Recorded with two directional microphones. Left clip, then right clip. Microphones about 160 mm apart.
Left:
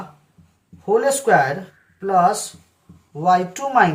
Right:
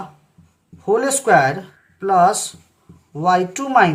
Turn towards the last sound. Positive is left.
turn(degrees=-40)  # may be behind; listen again after turning